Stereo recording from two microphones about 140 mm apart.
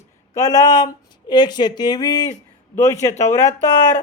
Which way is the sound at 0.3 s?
25° left (ahead or behind).